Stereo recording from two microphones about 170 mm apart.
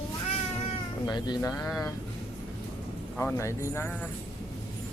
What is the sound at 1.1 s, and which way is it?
Speech, 25° left (ahead or behind).